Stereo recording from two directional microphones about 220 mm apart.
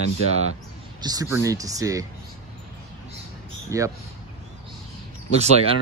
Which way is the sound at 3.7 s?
15° right (ahead or behind).